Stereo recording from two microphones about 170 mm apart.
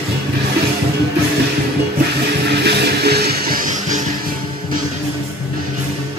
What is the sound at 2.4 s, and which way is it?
Music, 75° right (ahead or behind).